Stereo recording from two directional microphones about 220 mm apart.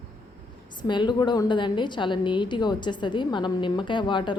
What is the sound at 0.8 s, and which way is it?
A woman's voice, 20° left (ahead or behind).